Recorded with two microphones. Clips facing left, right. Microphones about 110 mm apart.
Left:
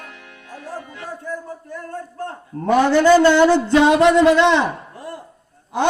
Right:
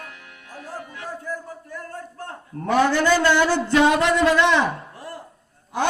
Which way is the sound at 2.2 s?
30° left (ahead or behind).